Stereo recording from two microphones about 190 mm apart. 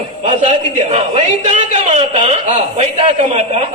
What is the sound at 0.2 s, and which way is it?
A man's voice, 35° right (ahead or behind).